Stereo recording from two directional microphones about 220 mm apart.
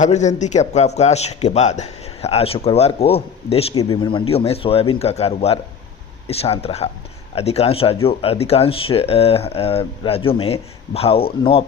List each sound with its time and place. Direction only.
0.0 s a man's voice: 30° left (ahead or behind)